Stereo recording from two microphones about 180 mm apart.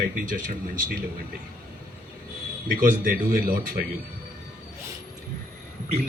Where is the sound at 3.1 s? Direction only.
50° right (ahead or behind).